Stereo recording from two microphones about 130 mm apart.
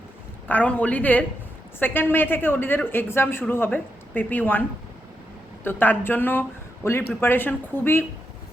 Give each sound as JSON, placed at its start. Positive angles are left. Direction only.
{"t": 0.4, "sound": "speech", "side_deg": 10}
{"t": 5.6, "sound": "speech", "side_deg": 15}